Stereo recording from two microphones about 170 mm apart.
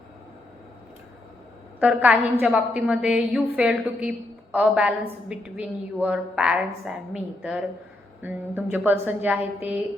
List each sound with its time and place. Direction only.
1.8 s a woman's voice: 10° right (ahead or behind)